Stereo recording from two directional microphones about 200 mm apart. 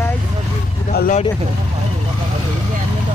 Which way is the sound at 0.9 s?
45° left (ahead or behind).